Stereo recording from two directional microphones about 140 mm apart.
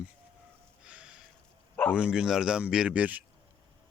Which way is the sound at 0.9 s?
5° right (ahead or behind).